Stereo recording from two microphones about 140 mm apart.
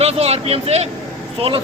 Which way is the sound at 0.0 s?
50° right (ahead or behind).